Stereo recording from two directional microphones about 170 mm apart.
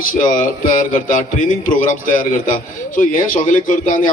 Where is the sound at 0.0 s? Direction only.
55° left (ahead or behind).